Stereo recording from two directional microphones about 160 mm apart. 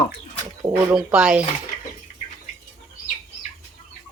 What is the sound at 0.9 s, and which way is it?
Speech, 5° right (ahead or behind).